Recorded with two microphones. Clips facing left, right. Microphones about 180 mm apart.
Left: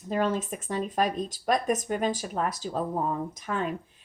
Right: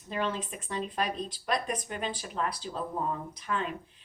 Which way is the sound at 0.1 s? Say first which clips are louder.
Left 6 dB; 45° left (ahead or behind).